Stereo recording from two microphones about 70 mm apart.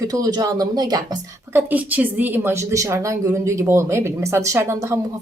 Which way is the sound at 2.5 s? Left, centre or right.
Right.